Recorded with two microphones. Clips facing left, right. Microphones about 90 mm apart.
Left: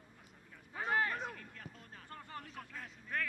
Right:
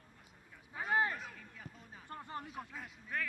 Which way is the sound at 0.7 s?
15° right (ahead or behind).